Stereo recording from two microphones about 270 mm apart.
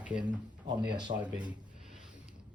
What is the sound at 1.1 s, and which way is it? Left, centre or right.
Speech, right.